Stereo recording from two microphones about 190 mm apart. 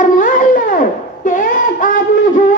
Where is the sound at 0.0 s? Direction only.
45° left (ahead or behind).